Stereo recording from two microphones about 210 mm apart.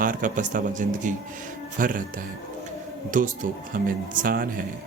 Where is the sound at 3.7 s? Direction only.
40° right (ahead or behind).